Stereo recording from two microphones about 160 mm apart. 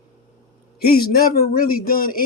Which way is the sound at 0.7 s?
70° left (ahead or behind).